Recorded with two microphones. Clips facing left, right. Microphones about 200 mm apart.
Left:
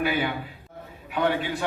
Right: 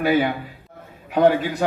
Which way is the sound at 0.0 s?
40° right (ahead or behind).